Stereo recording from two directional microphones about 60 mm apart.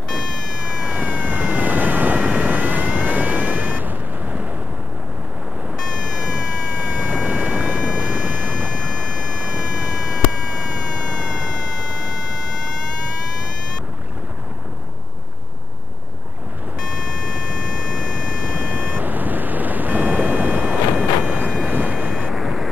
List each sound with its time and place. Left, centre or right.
0.8 s vehicle: right
6.3 s a sound: right
7.2 s vehicle: right
18.0 s vehicle: right
22.3 s vehicle: centre